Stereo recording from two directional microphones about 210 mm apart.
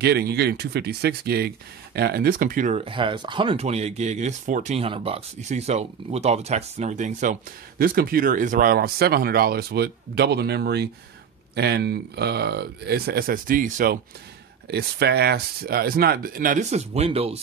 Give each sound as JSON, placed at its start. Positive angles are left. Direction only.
{"t": 0.0, "sound": "speech", "side_deg": -50}
{"t": 14.7, "sound": "speech", "side_deg": -50}